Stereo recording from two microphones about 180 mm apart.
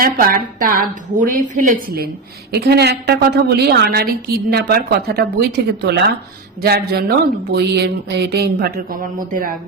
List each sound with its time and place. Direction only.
0.0 s a woman's voice: 50° right (ahead or behind)
2.5 s a woman's voice: 65° right (ahead or behind)